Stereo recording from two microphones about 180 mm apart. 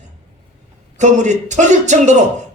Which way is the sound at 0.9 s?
40° right (ahead or behind).